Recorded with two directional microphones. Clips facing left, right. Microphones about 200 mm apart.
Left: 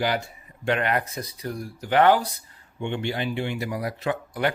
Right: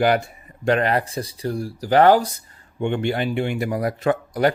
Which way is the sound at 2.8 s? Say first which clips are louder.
Right 6 dB; 50° right (ahead or behind).